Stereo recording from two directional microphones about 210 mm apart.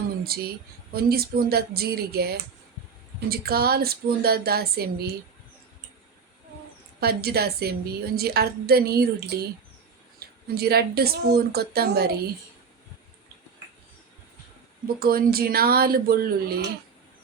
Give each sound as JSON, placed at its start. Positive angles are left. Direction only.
{"t": 0.3, "sound": "a woman's voice", "side_deg": -45}
{"t": 7.0, "sound": "a woman's voice", "side_deg": -50}
{"t": 14.9, "sound": "a woman's voice", "side_deg": -45}